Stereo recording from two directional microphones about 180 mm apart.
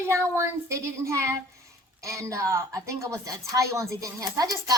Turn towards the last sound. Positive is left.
turn(degrees=-20)  # may be behind; listen again after turning